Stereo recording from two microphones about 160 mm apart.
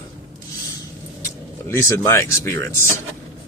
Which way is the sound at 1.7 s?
20° left (ahead or behind).